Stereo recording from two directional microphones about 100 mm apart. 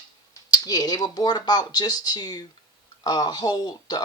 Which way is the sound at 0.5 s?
40° left (ahead or behind).